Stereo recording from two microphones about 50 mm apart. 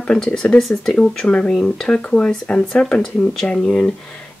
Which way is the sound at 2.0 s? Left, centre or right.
Left.